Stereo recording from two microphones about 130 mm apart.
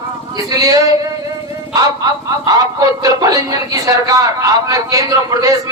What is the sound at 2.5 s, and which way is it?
Speech, 30° right (ahead or behind).